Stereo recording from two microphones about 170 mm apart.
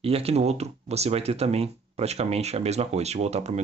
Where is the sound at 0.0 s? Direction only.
35° right (ahead or behind).